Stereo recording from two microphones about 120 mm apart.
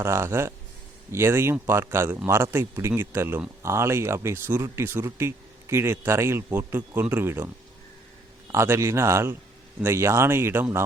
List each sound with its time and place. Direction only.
0.0 s speech: 20° right (ahead or behind)
8.5 s speech: 20° right (ahead or behind)